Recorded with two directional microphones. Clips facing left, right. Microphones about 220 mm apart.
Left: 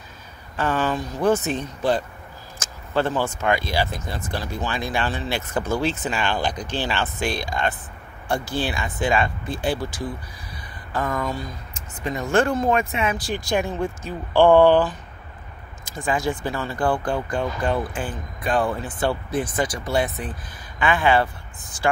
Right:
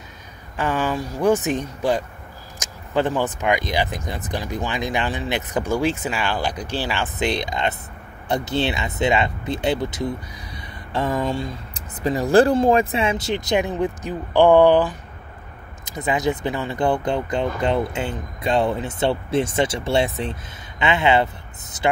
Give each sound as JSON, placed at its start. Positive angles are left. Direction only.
{"t": 0.6, "sound": "speech", "side_deg": -10}